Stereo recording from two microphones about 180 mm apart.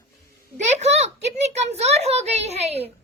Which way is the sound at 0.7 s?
40° right (ahead or behind).